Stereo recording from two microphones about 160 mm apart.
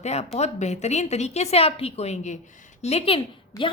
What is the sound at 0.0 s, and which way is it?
A woman's voice, 45° left (ahead or behind).